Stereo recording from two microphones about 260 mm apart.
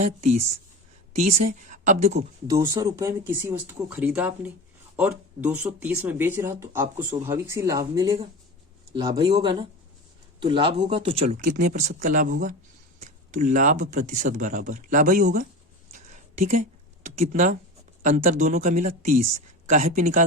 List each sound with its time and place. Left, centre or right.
0.0 s speech: right
2.5 s speech: centre; by 15.4 s right
15.9 s a sound: right
17.2 s speech: right